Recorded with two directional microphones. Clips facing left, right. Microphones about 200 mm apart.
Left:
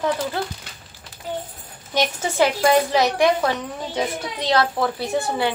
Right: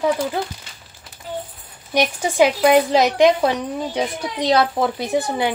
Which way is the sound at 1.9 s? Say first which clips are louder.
Right 3 dB; 15° right (ahead or behind).